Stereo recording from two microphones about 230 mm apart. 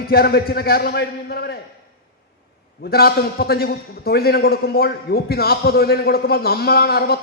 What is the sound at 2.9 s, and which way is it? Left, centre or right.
A man's voice, left.